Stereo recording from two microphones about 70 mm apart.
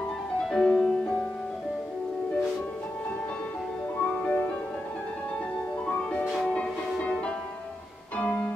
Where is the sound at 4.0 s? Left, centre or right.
Left.